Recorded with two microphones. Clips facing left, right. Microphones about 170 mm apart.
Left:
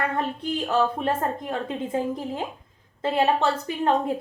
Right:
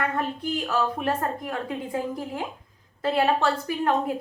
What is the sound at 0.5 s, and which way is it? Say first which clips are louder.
A woman's voice: left 4 dB; 25° left (ahead or behind).